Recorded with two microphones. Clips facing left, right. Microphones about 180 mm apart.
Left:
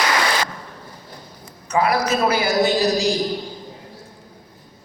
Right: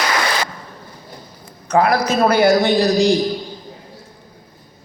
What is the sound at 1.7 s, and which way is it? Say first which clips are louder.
A man's voice: right 3 dB; 60° right (ahead or behind).